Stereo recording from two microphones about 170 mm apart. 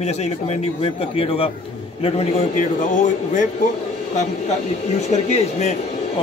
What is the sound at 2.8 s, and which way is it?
Speech, 45° left (ahead or behind).